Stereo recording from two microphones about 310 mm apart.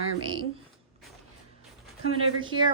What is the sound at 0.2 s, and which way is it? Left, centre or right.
Speech, centre.